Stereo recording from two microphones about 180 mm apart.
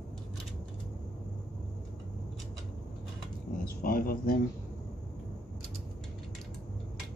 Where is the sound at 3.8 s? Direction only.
55° left (ahead or behind).